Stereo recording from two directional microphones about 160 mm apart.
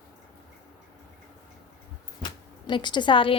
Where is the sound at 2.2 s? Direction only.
30° left (ahead or behind).